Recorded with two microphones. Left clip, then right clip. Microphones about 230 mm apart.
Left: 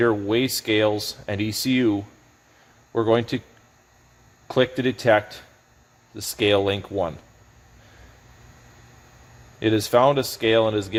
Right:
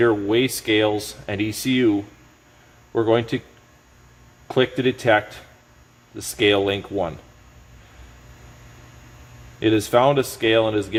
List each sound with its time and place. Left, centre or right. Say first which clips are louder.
0.0 s speech: right 2 dB; left
4.4 s speech: right 1 dB; left
9.6 s speech: right 1 dB; left